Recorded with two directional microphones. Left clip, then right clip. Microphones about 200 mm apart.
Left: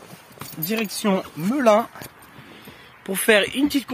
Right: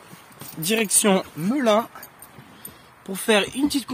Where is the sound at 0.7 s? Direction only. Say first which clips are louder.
Right 3 dB; 40° right (ahead or behind).